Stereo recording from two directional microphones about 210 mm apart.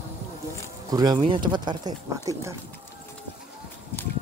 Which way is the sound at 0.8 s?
20° right (ahead or behind).